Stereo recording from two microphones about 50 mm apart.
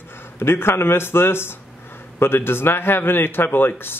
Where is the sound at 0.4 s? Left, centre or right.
Left.